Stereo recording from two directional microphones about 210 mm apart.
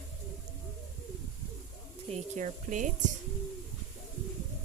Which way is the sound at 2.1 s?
35° right (ahead or behind).